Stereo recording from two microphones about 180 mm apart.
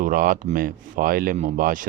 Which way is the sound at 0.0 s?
50° right (ahead or behind).